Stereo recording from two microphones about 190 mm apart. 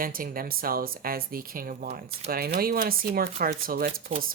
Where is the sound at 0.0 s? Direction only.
50° right (ahead or behind).